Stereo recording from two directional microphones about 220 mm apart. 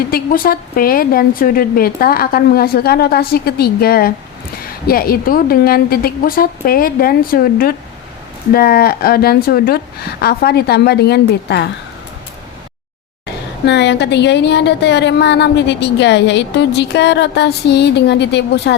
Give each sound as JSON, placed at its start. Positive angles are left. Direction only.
{"t": 0.1, "sound": "a woman's voice", "side_deg": 40}
{"t": 13.7, "sound": "a woman's voice", "side_deg": 50}